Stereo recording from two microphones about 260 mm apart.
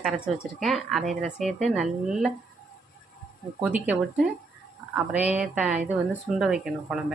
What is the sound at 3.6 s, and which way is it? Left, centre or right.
Speech, centre.